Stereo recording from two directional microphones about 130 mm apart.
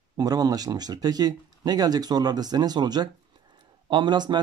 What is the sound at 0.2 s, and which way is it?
Speech, 30° right (ahead or behind).